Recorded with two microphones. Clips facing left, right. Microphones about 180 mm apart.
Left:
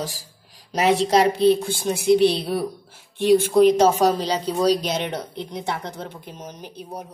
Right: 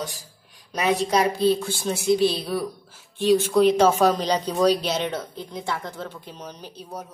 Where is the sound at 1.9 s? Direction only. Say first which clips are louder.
Left 4 dB; 60° left (ahead or behind).